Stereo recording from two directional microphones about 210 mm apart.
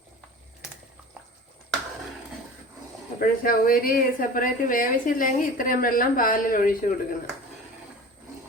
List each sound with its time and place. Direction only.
3.2 s a woman's voice: 40° left (ahead or behind)